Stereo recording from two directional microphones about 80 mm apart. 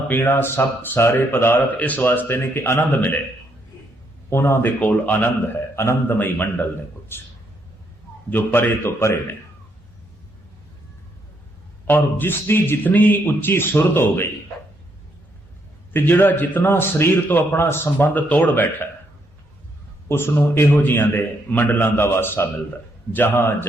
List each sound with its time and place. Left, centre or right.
0.1 s speech: left
4.3 s speech: left
4.8 s speech: centre
5.7 s speech: left
8.3 s speech: left
11.9 s speech: left
15.9 s speech: left
20.1 s speech: left